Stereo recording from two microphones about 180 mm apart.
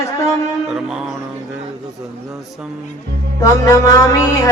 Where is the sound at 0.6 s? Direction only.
5° right (ahead or behind).